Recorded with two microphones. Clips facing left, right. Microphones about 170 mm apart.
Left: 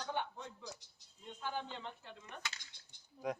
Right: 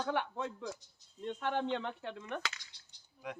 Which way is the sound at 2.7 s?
45° left (ahead or behind).